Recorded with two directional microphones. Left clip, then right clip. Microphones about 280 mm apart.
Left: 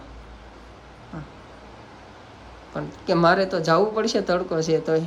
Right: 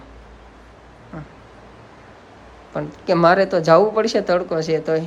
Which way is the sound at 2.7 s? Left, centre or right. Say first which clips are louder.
Right 4 dB; centre.